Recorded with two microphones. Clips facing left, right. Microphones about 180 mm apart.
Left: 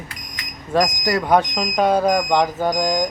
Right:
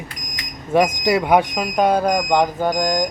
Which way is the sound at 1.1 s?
10° right (ahead or behind).